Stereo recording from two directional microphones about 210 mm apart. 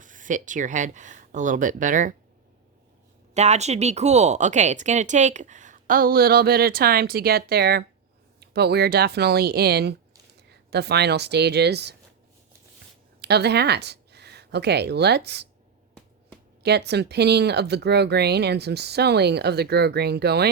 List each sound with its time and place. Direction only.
0.0 s speech: 40° right (ahead or behind)
3.3 s a woman's voice: 30° right (ahead or behind); by 11.9 s 50° right (ahead or behind)
13.2 s speech: 50° right (ahead or behind)
16.6 s speech: 50° right (ahead or behind)